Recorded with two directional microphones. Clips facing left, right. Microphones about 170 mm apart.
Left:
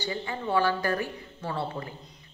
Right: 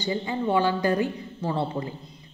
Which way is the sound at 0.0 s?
20° right (ahead or behind).